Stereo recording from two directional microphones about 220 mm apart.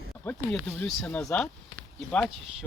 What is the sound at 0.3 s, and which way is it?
Speech, 5° left (ahead or behind).